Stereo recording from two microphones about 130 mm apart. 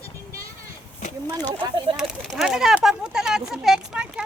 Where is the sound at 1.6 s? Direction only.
40° right (ahead or behind).